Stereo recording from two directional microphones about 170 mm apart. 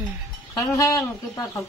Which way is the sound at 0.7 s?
20° left (ahead or behind).